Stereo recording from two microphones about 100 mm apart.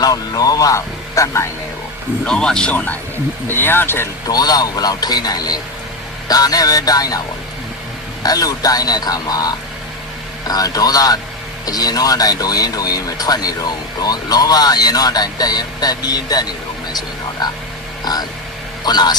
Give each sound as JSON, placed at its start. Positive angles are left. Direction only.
{"t": 0.0, "sound": "speech", "side_deg": 40}
{"t": 2.2, "sound": "speech", "side_deg": 5}
{"t": 4.3, "sound": "speech", "side_deg": 40}
{"t": 8.2, "sound": "a man's voice", "side_deg": 40}